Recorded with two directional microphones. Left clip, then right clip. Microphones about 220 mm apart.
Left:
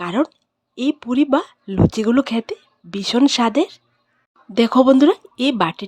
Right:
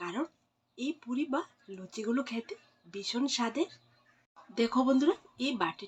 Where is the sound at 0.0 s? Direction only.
55° left (ahead or behind).